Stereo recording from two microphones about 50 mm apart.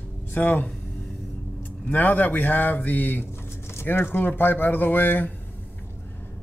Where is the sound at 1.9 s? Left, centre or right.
Left.